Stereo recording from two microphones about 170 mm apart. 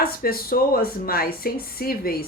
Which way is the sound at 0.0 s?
60° left (ahead or behind).